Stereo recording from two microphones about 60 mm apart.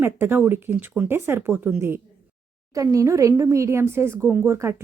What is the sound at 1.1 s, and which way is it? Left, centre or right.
Speech, right.